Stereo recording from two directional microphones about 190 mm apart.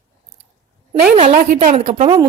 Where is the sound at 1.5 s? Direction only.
40° right (ahead or behind).